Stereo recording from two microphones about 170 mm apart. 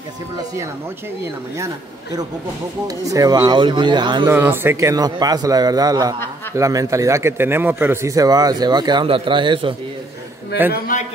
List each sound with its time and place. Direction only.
2.9 s a man's voice: 20° right (ahead or behind)
4.3 s a man's voice: 15° right (ahead or behind); by 9.8 s 30° right (ahead or behind)
10.7 s a man's voice: 50° left (ahead or behind)